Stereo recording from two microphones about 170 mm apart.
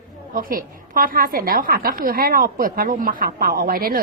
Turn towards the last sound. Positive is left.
turn(degrees=-60)  # may be behind; listen again after turning